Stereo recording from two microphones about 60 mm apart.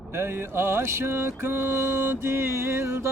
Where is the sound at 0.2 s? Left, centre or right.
Right.